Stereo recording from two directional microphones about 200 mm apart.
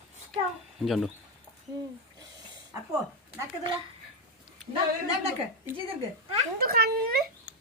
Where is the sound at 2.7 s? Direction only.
10° right (ahead or behind).